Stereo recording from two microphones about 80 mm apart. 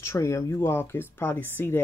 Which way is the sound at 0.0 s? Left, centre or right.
Left.